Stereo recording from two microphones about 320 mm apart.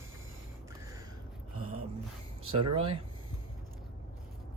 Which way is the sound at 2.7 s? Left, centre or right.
Centre.